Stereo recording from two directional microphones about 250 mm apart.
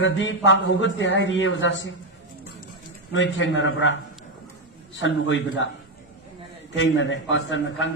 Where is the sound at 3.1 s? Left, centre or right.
Left.